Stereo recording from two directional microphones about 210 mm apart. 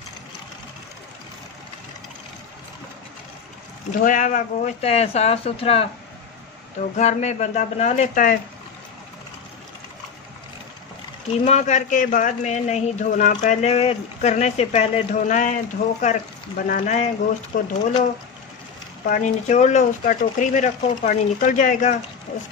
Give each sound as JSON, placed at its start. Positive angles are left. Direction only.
{"t": 4.0, "sound": "speech", "side_deg": 40}
{"t": 7.0, "sound": "speech", "side_deg": 35}
{"t": 11.4, "sound": "speech", "side_deg": 35}
{"t": 19.0, "sound": "speech", "side_deg": 35}